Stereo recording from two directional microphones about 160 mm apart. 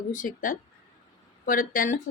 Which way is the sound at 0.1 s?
55° left (ahead or behind).